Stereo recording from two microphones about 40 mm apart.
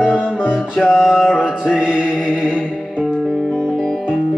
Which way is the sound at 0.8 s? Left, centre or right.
Centre.